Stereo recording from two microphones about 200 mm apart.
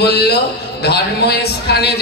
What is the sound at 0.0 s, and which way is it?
A man's voice, 55° left (ahead or behind).